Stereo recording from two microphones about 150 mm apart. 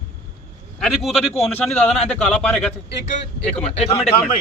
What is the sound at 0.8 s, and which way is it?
Speech, centre (ahead or behind).